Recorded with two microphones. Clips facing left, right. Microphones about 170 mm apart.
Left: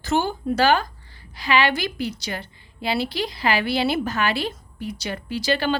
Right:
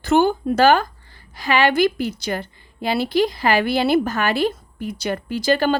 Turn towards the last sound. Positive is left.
turn(degrees=-45)  # may be behind; listen again after turning